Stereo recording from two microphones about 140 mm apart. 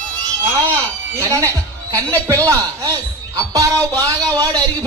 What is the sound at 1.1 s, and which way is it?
A man's voice, 20° right (ahead or behind).